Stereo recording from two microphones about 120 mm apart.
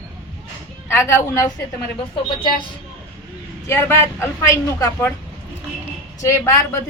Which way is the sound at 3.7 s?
20° left (ahead or behind).